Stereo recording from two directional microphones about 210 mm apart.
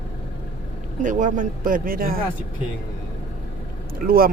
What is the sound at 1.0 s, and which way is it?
Speech, 35° right (ahead or behind).